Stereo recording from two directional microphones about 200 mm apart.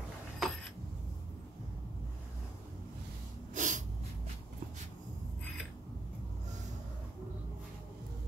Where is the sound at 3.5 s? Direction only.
40° right (ahead or behind).